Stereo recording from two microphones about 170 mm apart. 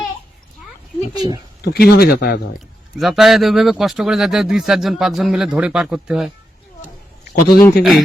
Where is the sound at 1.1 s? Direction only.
25° right (ahead or behind).